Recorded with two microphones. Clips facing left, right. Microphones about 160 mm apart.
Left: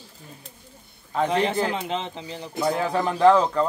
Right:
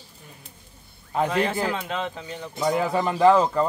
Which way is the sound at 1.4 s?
20° left (ahead or behind).